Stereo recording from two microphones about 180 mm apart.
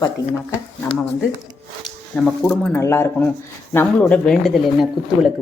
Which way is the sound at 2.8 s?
15° left (ahead or behind).